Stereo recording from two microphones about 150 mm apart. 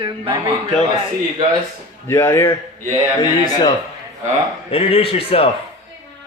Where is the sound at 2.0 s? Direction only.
15° left (ahead or behind).